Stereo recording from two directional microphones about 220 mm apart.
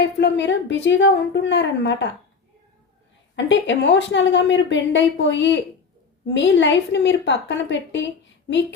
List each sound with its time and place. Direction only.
0.0 s a woman's voice: 55° left (ahead or behind)
3.3 s a woman's voice: 55° left (ahead or behind)